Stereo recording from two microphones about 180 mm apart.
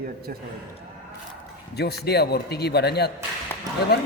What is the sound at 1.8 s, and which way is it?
A woman's voice, 65° left (ahead or behind).